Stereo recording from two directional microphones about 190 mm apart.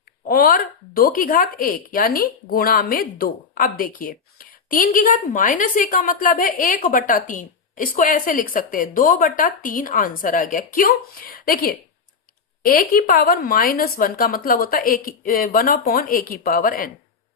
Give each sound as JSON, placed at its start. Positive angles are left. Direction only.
{"t": 0.3, "sound": "speech", "side_deg": 50}